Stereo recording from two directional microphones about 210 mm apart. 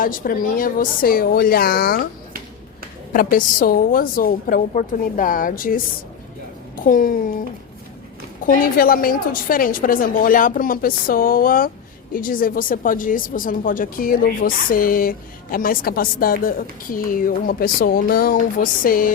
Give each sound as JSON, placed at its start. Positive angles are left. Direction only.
{"t": 0.0, "sound": "a woman's voice", "side_deg": 40}
{"t": 3.1, "sound": "speech", "side_deg": 40}
{"t": 8.4, "sound": "a woman's voice", "side_deg": 40}